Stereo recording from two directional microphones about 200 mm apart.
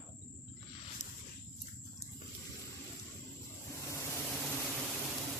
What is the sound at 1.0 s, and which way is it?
Snake, 35° left (ahead or behind).